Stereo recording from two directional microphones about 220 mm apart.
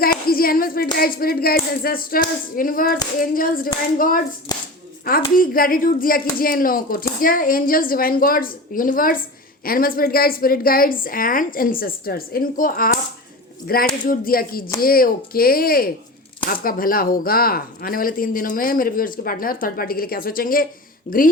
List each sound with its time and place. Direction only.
0.3 s clapping: 40° left (ahead or behind)
0.9 s speech: 40° left (ahead or behind)
4.5 s speech: 15° left (ahead or behind)
5.1 s speech: 40° left (ahead or behind)
14.0 s speech: 40° left (ahead or behind)